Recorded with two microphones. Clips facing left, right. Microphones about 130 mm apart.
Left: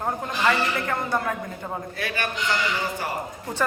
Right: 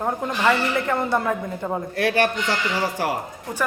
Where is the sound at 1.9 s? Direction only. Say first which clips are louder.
Right 11 dB; 75° right (ahead or behind).